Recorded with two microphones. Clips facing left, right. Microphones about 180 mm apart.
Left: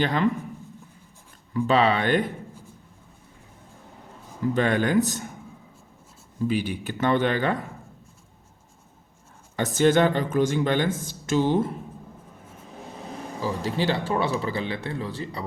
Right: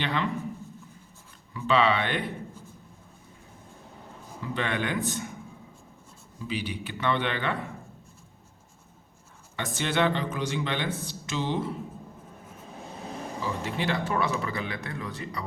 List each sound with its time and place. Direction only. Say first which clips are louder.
0.0 s speech: left 6 dB; 40° left (ahead or behind)
1.5 s speech: left 3 dB; 45° left (ahead or behind)
4.5 s a man's voice: left 7 dB; 40° left (ahead or behind)
6.4 s speech: left 8 dB; 50° left (ahead or behind)
9.6 s speech: left 8 dB; 40° left (ahead or behind)
13.4 s a man's voice: left 5 dB; 35° left (ahead or behind)